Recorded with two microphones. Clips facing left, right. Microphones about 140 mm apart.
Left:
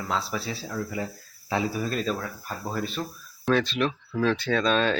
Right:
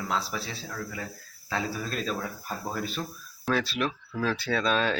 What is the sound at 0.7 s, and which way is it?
Speech, 20° left (ahead or behind).